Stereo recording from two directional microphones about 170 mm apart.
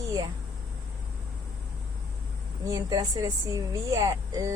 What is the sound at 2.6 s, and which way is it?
Speech, 20° right (ahead or behind).